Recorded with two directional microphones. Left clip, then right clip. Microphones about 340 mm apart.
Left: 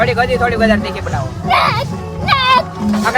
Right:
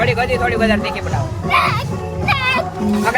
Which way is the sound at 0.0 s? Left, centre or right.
Centre.